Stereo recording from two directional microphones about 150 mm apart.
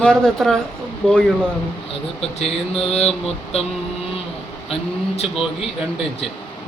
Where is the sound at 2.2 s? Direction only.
40° left (ahead or behind).